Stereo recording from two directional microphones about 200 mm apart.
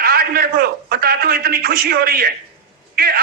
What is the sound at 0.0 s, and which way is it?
A man's voice, 50° right (ahead or behind).